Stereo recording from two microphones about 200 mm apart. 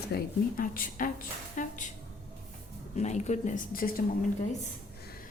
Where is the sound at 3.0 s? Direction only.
35° left (ahead or behind).